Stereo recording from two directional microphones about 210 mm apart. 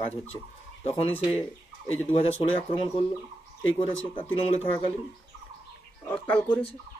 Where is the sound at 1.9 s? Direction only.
25° left (ahead or behind).